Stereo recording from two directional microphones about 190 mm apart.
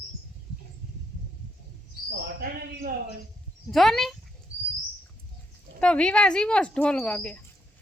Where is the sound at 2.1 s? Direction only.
55° right (ahead or behind).